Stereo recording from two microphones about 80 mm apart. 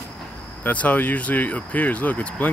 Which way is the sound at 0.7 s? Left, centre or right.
Centre.